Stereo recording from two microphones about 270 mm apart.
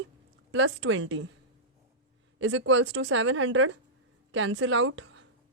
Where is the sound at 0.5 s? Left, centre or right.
Right.